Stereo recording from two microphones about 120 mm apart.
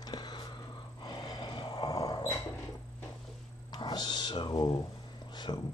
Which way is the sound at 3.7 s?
35° left (ahead or behind).